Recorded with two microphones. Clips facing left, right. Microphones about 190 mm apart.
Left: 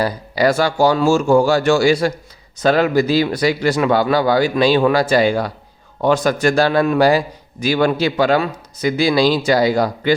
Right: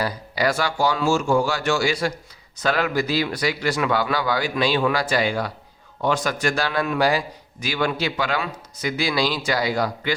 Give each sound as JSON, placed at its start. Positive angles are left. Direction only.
{"t": 0.0, "sound": "a man's voice", "side_deg": 30}